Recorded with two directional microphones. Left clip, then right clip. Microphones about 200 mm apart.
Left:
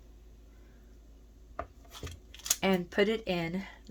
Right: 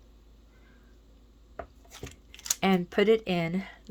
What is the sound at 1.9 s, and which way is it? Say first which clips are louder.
Speech: right 1 dB; 30° right (ahead or behind).